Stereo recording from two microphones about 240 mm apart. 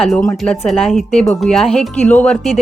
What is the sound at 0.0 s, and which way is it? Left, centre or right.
Speech, centre.